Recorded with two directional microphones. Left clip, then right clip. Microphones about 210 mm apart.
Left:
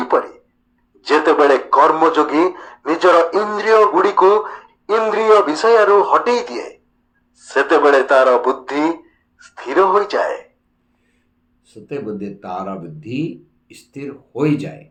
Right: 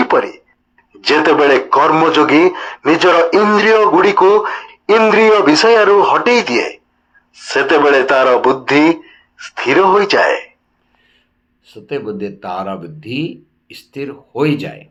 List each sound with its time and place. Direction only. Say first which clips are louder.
0.0 s a sound: right 4 dB; 35° right (ahead or behind)
1.0 s speech: right 2 dB; 35° right (ahead or behind)
11.6 s speech: right 4 dB; centre (ahead or behind)